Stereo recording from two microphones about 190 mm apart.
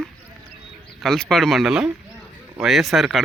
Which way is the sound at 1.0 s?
Centre (ahead or behind).